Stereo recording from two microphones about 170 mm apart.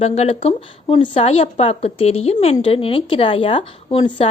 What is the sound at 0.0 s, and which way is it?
Speech, 40° left (ahead or behind).